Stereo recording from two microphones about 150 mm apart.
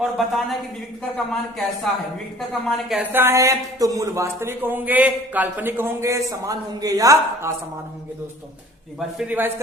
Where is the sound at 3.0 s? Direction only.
15° right (ahead or behind).